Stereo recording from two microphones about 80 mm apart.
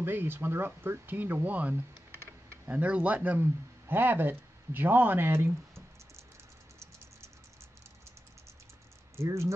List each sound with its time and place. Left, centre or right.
0.0 s speech: right
9.1 s speech: right